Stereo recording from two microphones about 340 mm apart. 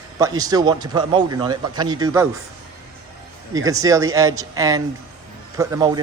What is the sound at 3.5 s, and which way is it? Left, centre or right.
A man's voice, centre.